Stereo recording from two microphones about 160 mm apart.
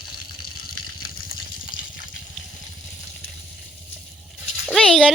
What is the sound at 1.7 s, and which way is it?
Water, 60° left (ahead or behind).